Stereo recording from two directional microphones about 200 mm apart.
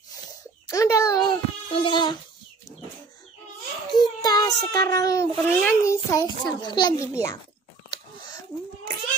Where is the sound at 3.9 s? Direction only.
20° left (ahead or behind).